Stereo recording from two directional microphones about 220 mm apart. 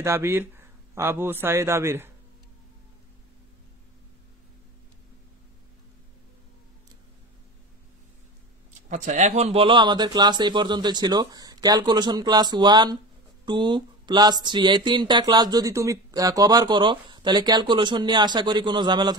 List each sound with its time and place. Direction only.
0.0 s speech: 10° right (ahead or behind)
8.8 s speech: 35° right (ahead or behind); by 19.1 s 20° right (ahead or behind)